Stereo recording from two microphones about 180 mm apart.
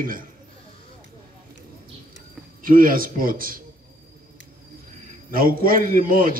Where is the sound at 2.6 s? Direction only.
50° right (ahead or behind).